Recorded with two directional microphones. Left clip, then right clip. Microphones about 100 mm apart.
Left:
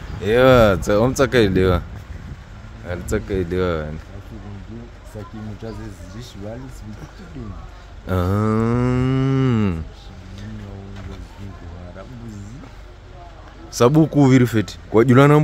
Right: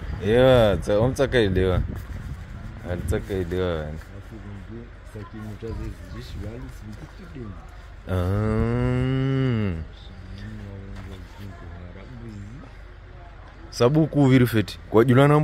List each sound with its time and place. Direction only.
0.2 s speech: 35° left (ahead or behind)
2.9 s speech: 35° left (ahead or behind)
5.6 s speech: 35° left (ahead or behind)
8.1 s livestock: 40° left (ahead or behind); by 9.8 s 55° left (ahead or behind)
13.7 s livestock: 40° left (ahead or behind)
14.2 s speech: 10° left (ahead or behind)
15.1 s speech: 40° left (ahead or behind)